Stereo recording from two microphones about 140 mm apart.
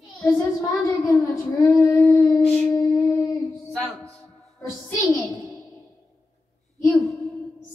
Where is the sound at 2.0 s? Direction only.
25° left (ahead or behind).